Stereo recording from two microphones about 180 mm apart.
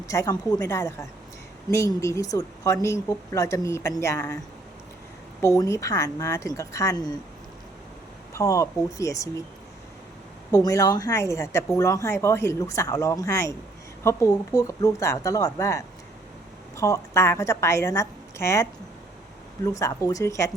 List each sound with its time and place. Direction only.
0.1 s speech: 20° left (ahead or behind)
5.4 s speech: 15° left (ahead or behind)
8.3 s speech: 20° left (ahead or behind)
10.5 s speech: 20° left (ahead or behind)